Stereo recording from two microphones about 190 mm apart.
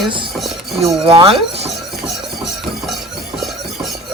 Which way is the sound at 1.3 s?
30° right (ahead or behind).